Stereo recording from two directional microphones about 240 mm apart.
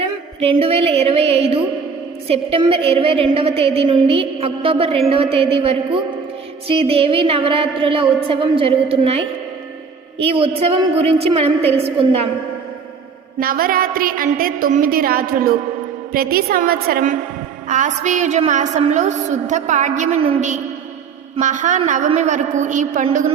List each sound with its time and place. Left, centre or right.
0.3 s a woman's voice: right
13.4 s a woman's voice: right